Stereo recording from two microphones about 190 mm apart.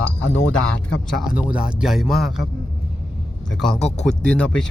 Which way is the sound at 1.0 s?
Centre (ahead or behind).